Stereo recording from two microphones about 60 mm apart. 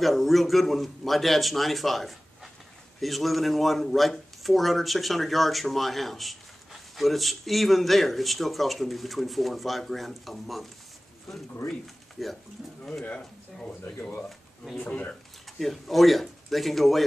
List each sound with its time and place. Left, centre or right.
0.0 s speech: centre
12.2 s speech: centre
13.2 s speech: centre
14.8 s speech: left
15.6 s speech: centre